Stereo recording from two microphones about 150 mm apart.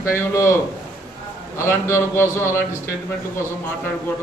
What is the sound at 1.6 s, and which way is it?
Mantra, 15° left (ahead or behind).